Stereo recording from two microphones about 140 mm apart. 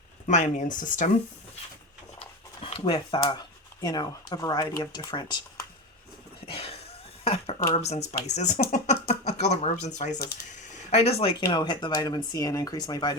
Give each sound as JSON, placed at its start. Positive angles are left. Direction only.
{"t": 0.3, "sound": "speech", "side_deg": 60}
{"t": 2.6, "sound": "speech", "side_deg": 40}
{"t": 6.4, "sound": "cough", "side_deg": 45}
{"t": 7.3, "sound": "speech", "side_deg": 45}
{"t": 8.6, "sound": "speech", "side_deg": 90}
{"t": 9.2, "sound": "speech", "side_deg": 55}
{"t": 10.5, "sound": "a sound", "side_deg": 55}
{"t": 11.5, "sound": "speech", "side_deg": 35}